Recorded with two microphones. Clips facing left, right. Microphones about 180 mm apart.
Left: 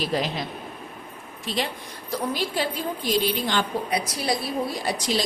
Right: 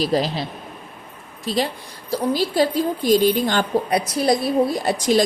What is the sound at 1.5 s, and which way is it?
A woman's voice, 40° right (ahead or behind).